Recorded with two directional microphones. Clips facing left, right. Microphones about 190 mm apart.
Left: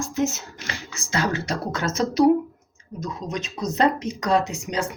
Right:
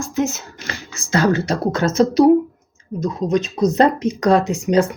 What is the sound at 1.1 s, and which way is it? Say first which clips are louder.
Speech: right 8 dB; 35° right (ahead or behind).